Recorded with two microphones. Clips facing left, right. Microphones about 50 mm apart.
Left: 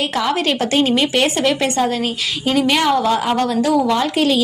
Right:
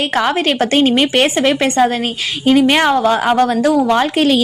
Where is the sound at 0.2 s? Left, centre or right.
Right.